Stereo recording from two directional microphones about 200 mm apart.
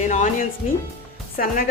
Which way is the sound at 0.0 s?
40° left (ahead or behind).